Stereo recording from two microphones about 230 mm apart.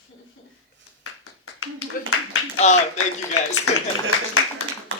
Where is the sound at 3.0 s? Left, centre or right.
Left.